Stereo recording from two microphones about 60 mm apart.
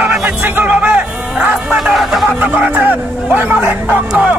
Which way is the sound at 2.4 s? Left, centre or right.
Right.